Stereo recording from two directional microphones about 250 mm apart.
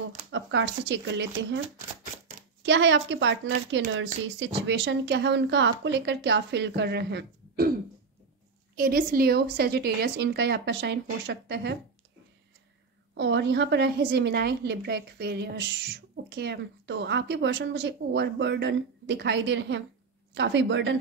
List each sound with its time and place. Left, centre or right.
0.3 s a woman's voice: right
2.6 s a woman's voice: right
8.7 s a woman's voice: right
13.1 s a woman's voice: right